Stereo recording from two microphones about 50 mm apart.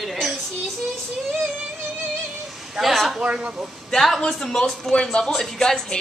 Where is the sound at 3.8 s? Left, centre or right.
Centre.